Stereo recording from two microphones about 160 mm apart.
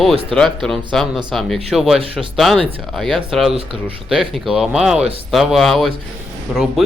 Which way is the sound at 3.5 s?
35° right (ahead or behind).